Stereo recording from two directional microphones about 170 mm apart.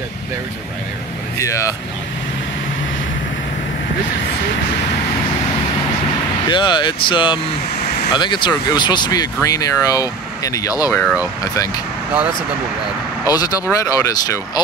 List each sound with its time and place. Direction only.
1.4 s speech: 20° left (ahead or behind)
6.4 s speech: 25° left (ahead or behind)
13.2 s speech: 20° left (ahead or behind)